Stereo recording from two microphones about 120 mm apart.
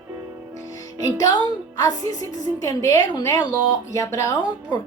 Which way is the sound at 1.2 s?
35° left (ahead or behind).